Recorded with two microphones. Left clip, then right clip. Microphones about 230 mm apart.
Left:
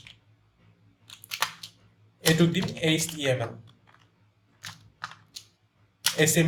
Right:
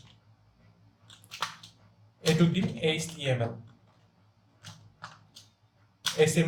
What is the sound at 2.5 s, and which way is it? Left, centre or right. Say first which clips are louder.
Speech: left 3 dB; left.